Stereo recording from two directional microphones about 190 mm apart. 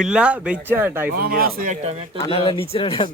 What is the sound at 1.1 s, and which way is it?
Speech, 50° right (ahead or behind).